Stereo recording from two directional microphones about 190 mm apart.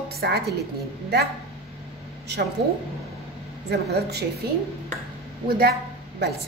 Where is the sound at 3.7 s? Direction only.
60° right (ahead or behind).